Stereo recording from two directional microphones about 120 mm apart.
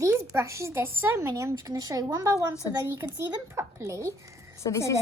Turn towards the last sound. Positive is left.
turn(degrees=25)  # may be behind; listen again after turning